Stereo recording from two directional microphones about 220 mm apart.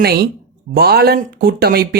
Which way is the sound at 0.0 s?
45° right (ahead or behind).